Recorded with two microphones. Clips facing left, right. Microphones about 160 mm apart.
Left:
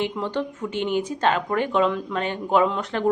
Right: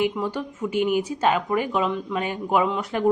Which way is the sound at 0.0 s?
10° right (ahead or behind).